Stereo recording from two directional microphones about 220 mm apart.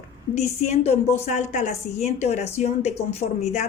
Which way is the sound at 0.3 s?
30° left (ahead or behind).